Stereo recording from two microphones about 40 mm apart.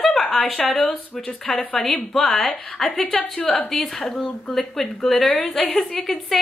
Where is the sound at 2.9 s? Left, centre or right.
Left.